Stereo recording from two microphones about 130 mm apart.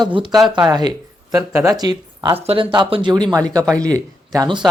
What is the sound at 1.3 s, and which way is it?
Speech, 25° right (ahead or behind).